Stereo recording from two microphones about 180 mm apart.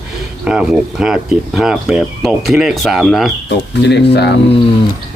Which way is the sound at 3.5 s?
70° left (ahead or behind).